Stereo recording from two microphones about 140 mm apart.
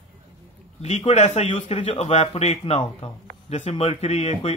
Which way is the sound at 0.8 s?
50° left (ahead or behind).